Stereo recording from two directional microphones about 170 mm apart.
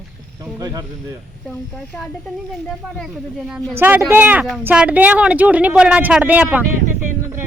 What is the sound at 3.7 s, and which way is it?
Speech, 10° right (ahead or behind).